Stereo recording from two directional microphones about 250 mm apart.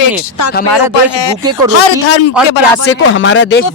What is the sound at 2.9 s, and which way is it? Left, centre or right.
Speech, left.